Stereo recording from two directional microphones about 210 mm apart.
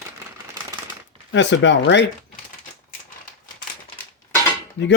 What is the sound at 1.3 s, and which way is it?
Speech, 60° left (ahead or behind).